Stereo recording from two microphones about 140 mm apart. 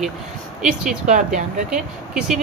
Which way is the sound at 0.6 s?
5° right (ahead or behind).